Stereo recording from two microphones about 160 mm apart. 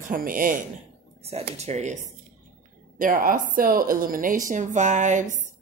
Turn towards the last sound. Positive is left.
turn(degrees=-50)  # may be behind; listen again after turning